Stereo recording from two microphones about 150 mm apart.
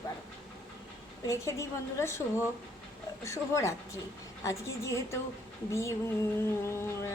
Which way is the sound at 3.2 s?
20° left (ahead or behind).